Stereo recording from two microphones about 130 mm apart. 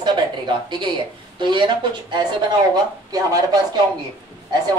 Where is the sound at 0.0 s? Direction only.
35° right (ahead or behind).